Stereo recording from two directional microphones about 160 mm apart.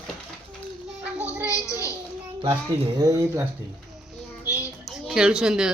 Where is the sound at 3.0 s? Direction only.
20° right (ahead or behind).